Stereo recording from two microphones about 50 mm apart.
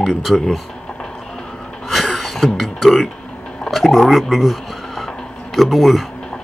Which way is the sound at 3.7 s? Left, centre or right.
Centre.